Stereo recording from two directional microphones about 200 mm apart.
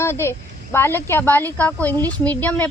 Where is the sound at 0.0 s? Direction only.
10° left (ahead or behind).